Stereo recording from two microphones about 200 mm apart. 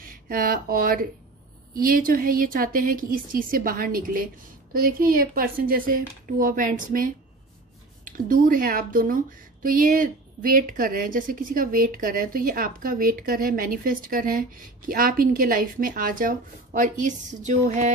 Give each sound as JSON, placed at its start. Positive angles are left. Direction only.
{"t": 0.0, "sound": "speech", "side_deg": -45}